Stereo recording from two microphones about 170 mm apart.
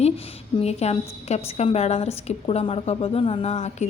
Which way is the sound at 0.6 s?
40° left (ahead or behind).